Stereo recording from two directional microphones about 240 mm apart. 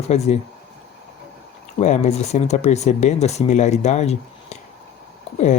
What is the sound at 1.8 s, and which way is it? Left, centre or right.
Speech, left.